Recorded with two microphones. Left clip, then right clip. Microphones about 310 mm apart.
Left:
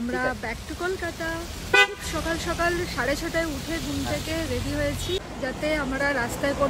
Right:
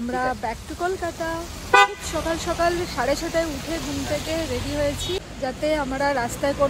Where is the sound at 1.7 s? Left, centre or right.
Centre.